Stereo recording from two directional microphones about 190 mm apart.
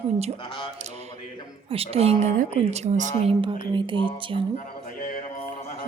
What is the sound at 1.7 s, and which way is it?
Speech, 30° right (ahead or behind).